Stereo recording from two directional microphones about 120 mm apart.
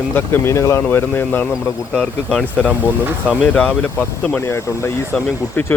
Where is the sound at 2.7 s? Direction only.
10° right (ahead or behind).